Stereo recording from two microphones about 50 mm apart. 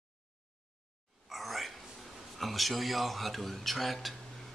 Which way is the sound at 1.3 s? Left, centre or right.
Centre.